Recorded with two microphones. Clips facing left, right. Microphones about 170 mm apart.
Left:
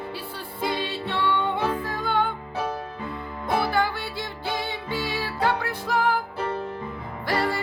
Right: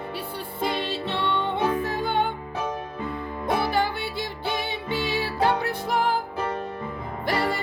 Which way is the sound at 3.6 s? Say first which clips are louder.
Even; 20° right (ahead or behind).